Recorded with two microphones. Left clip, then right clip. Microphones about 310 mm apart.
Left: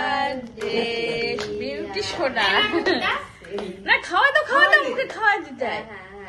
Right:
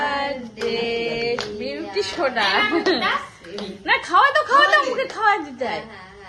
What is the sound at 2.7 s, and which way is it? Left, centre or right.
Music, right.